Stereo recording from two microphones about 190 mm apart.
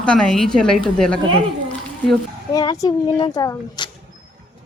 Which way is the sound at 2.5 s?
20° left (ahead or behind).